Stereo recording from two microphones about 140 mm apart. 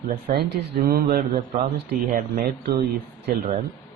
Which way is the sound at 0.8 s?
90° right.